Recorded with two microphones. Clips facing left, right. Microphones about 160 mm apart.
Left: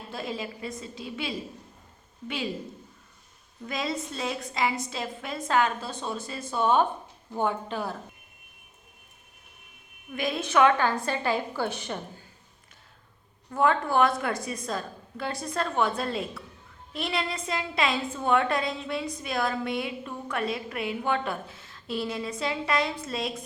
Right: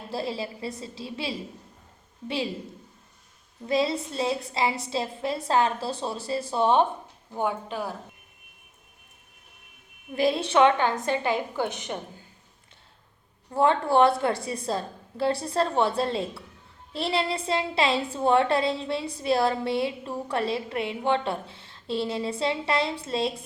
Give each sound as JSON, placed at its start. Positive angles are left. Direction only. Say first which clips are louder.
{"t": 0.1, "sound": "a woman's voice", "louder": "right 4 dB", "side_deg": -30}
{"t": 3.7, "sound": "a woman's voice", "louder": "right 6 dB", "side_deg": -30}
{"t": 7.3, "sound": "speech", "louder": "even", "side_deg": -10}
{"t": 10.1, "sound": "a woman's voice", "louder": "right 5 dB", "side_deg": -30}
{"t": 13.5, "sound": "a woman's voice", "louder": "right 2 dB", "side_deg": -30}